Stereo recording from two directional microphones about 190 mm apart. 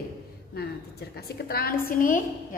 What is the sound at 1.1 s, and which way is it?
A woman's voice, 50° left (ahead or behind).